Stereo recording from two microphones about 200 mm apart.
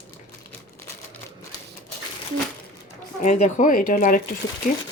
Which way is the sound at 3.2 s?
35° left (ahead or behind).